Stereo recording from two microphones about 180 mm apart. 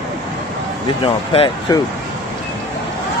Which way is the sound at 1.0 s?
30° left (ahead or behind).